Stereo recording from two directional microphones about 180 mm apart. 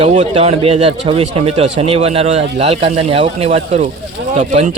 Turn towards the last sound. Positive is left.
turn(degrees=-40)  # may be behind; listen again after turning